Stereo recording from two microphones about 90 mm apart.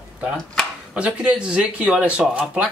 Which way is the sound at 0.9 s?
15° right (ahead or behind).